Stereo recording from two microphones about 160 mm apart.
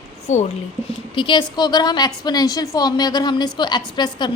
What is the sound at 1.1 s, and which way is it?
A woman's voice, 30° left (ahead or behind).